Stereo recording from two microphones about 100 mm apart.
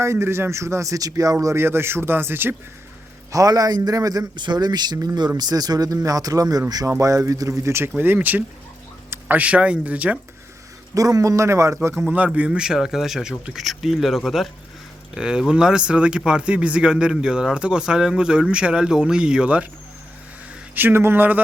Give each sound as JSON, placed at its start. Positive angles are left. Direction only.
{"t": 0.0, "sound": "speech", "side_deg": -30}
{"t": 3.3, "sound": "a man's voice", "side_deg": -40}
{"t": 10.9, "sound": "speech", "side_deg": -35}
{"t": 12.0, "sound": "a man's voice", "side_deg": -15}
{"t": 20.7, "sound": "speech", "side_deg": -20}